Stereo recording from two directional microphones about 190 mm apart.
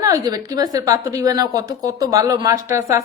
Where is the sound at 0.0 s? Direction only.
20° right (ahead or behind).